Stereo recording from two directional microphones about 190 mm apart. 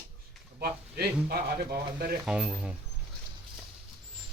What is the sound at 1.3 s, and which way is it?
Speech, 55° right (ahead or behind).